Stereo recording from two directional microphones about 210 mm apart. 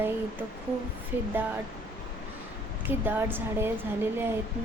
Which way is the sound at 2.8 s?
10° right (ahead or behind).